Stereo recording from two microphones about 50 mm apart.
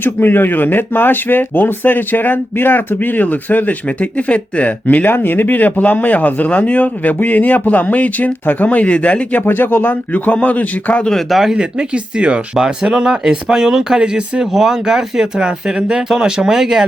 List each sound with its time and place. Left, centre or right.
0.0 s speech: left
5.0 s a man's voice: left
11.3 s speech: centre
11.5 s speech: centre